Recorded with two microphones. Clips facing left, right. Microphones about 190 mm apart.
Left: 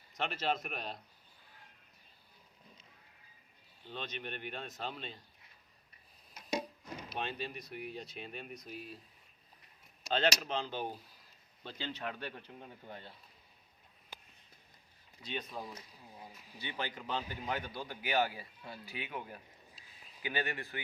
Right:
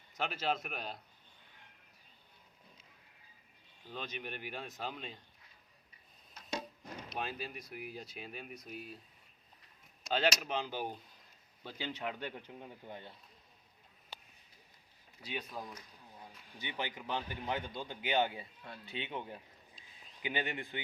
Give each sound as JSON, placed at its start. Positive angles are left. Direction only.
{"t": 0.2, "sound": "speech", "side_deg": -5}
{"t": 3.8, "sound": "speech", "side_deg": -10}
{"t": 6.3, "sound": "a sound", "side_deg": 10}
{"t": 7.1, "sound": "speech", "side_deg": -5}
{"t": 10.1, "sound": "speech", "side_deg": -5}
{"t": 15.2, "sound": "speech", "side_deg": -10}
{"t": 16.1, "sound": "a sound", "side_deg": 10}
{"t": 16.6, "sound": "a man's voice", "side_deg": -15}
{"t": 18.6, "sound": "speech", "side_deg": 5}
{"t": 18.9, "sound": "a man's voice", "side_deg": -25}
{"t": 19.7, "sound": "a sound", "side_deg": 5}
{"t": 20.2, "sound": "speech", "side_deg": -20}